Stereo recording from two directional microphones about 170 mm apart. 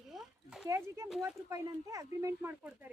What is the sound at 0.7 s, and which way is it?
Speech, 15° right (ahead or behind).